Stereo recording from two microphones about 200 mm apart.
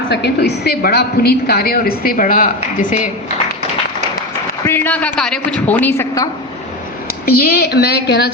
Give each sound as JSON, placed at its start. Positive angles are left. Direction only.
{"t": 0.1, "sound": "a woman's voice", "side_deg": 55}
{"t": 4.6, "sound": "a woman's voice", "side_deg": 10}
{"t": 7.3, "sound": "a woman's voice", "side_deg": 50}